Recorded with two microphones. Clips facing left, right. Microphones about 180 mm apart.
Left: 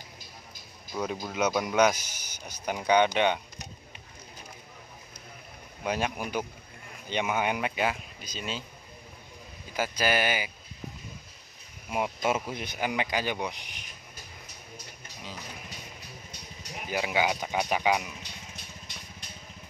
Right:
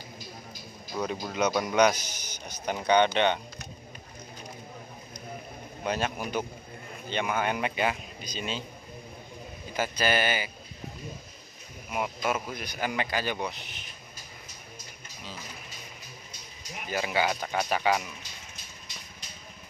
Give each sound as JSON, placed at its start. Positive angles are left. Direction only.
{"t": 0.9, "sound": "speech", "side_deg": 10}
{"t": 5.9, "sound": "speech", "side_deg": 10}
{"t": 7.6, "sound": "speech", "side_deg": 5}
{"t": 9.8, "sound": "speech", "side_deg": 10}
{"t": 11.9, "sound": "speech", "side_deg": 25}
{"t": 16.9, "sound": "speech", "side_deg": 10}
{"t": 18.2, "sound": "vehicle", "side_deg": 60}